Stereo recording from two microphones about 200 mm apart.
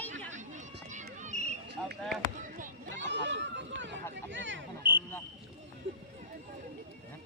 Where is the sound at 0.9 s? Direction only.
35° right (ahead or behind).